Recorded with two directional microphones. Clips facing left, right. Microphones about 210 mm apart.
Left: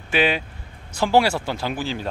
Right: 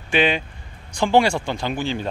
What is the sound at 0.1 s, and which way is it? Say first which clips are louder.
Speech: right 1 dB; 5° left (ahead or behind).